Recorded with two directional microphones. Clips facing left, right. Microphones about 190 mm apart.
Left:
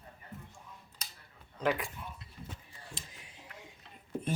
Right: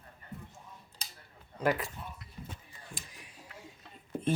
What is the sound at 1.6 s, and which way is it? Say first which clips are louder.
Speech: right 2 dB; 5° right (ahead or behind).